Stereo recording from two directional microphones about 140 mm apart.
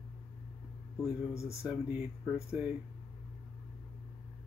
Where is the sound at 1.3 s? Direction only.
20° left (ahead or behind).